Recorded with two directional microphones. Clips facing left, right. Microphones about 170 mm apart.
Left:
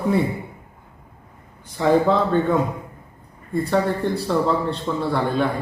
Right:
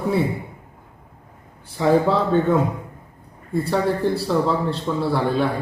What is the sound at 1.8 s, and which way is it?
Speech, 5° right (ahead or behind).